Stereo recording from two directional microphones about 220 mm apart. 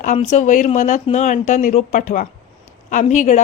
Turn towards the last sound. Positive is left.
turn(degrees=35)  # may be behind; listen again after turning